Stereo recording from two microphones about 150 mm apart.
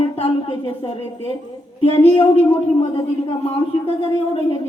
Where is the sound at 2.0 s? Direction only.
40° left (ahead or behind).